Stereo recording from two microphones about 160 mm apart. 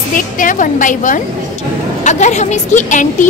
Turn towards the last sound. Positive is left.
turn(degrees=50)  # may be behind; listen again after turning